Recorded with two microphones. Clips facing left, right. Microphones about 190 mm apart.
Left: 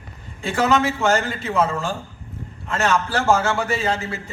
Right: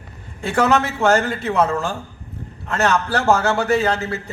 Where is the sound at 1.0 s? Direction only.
60° right (ahead or behind).